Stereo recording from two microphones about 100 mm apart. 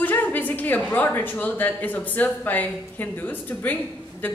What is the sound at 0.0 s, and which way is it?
Speech, 15° left (ahead or behind).